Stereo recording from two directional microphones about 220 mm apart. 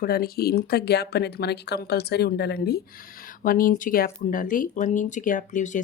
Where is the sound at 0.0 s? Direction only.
45° left (ahead or behind).